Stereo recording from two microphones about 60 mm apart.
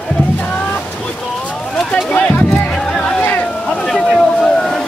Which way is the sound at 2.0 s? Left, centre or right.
Left.